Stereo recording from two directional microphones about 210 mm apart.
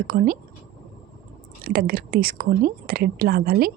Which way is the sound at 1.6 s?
45° right (ahead or behind).